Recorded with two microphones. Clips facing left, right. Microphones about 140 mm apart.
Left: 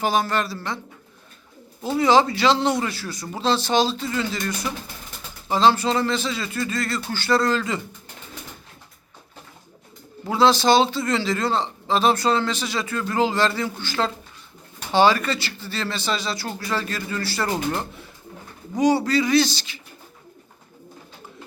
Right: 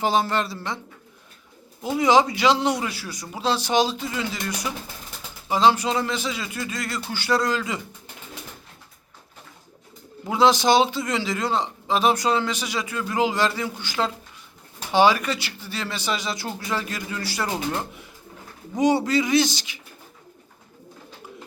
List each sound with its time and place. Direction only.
0.0 s speech: 25° right (ahead or behind)
1.8 s a man's voice: 15° right (ahead or behind)
10.2 s a man's voice: 15° right (ahead or behind)
18.8 s speech: 20° right (ahead or behind)